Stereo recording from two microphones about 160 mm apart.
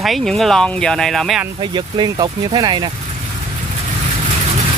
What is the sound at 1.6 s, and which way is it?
Speech, 30° right (ahead or behind).